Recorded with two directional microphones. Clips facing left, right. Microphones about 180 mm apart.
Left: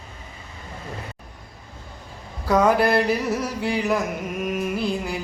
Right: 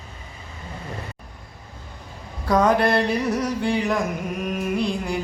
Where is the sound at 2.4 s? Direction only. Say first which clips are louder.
Even; 5° left (ahead or behind).